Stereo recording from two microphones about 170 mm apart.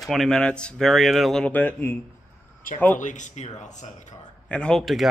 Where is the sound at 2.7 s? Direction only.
55° left (ahead or behind).